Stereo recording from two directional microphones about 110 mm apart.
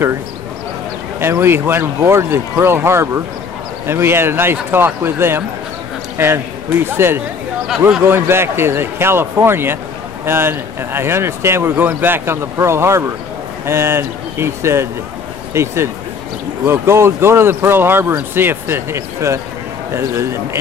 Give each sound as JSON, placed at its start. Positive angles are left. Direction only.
{"t": 1.2, "sound": "speech", "side_deg": -20}